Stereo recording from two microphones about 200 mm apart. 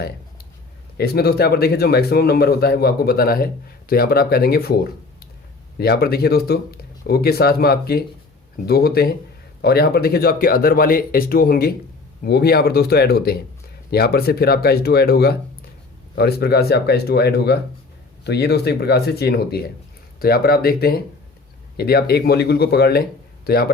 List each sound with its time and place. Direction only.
0.9 s speech: 50° left (ahead or behind)